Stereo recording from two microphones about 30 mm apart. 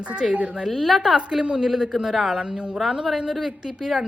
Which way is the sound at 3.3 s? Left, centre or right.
Centre.